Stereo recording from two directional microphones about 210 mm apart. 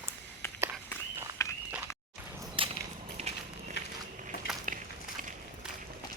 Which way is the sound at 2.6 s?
25° right (ahead or behind).